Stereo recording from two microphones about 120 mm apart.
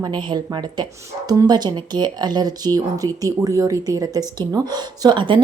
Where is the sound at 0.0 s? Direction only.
40° right (ahead or behind).